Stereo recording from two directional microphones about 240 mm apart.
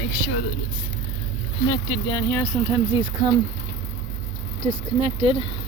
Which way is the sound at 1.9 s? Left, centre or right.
Centre.